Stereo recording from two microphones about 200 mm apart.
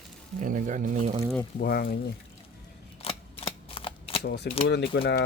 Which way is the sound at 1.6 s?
50° left (ahead or behind).